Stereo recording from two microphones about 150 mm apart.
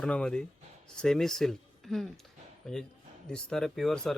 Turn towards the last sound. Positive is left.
turn(degrees=5)  # may be behind; listen again after turning